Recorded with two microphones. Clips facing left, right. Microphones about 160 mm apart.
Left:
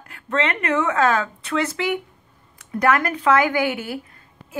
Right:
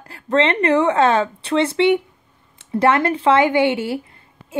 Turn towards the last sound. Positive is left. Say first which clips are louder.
# right 5 dB
turn(degrees=-25)  # may be behind; listen again after turning